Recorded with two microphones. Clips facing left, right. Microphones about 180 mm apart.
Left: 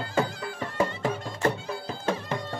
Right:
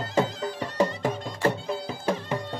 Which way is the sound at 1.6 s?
15° right (ahead or behind).